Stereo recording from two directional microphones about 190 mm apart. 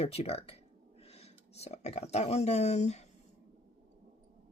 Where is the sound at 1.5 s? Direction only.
35° left (ahead or behind).